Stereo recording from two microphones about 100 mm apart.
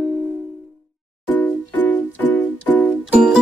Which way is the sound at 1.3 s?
15° left (ahead or behind).